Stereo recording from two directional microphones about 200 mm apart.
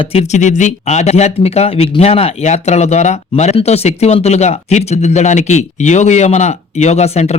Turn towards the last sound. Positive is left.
turn(degrees=35)  # may be behind; listen again after turning